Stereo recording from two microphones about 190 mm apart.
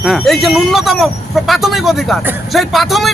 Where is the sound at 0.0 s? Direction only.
Centre (ahead or behind).